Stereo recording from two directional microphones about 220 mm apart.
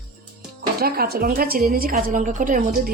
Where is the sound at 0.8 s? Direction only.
45° right (ahead or behind).